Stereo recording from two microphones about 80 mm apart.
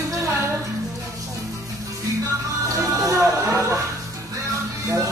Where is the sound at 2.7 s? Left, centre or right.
Right.